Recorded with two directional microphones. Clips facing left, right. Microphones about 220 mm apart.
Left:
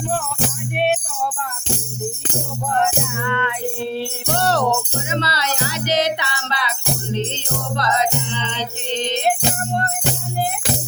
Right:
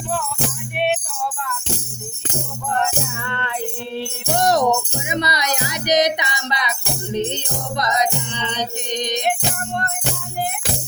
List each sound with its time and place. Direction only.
3.2 s music: 35° right (ahead or behind)
4.4 s speech: 15° right (ahead or behind)
7.8 s music: 15° right (ahead or behind)